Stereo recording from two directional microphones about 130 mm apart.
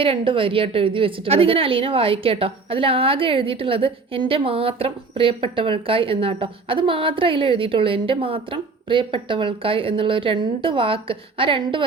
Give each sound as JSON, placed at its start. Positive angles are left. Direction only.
{"t": 0.0, "sound": "a woman's voice", "side_deg": -45}